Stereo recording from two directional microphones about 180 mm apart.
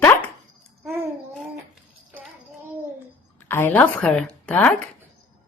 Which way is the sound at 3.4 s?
10° left (ahead or behind).